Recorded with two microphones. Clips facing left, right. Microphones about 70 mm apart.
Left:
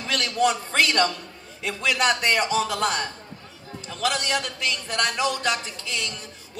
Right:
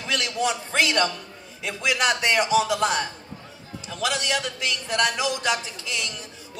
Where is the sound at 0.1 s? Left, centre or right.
Left.